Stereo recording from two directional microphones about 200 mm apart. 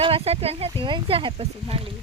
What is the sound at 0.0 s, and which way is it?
Speech, 30° right (ahead or behind).